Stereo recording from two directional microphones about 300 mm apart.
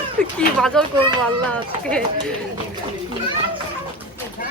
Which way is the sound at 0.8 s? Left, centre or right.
Centre.